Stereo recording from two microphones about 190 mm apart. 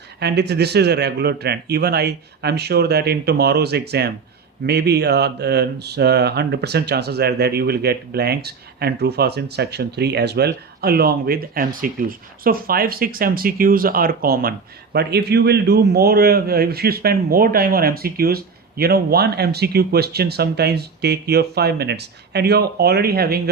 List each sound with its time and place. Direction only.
0.2 s speech: 60° right (ahead or behind)